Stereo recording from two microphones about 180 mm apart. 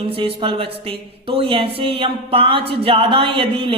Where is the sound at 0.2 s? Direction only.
30° right (ahead or behind).